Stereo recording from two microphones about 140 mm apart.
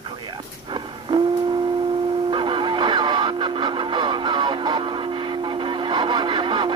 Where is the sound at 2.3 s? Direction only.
35° right (ahead or behind).